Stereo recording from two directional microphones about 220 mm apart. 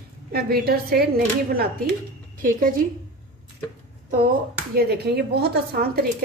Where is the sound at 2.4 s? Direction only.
40° right (ahead or behind).